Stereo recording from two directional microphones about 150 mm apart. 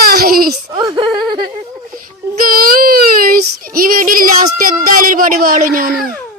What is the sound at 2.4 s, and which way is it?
Child singing, 70° right (ahead or behind).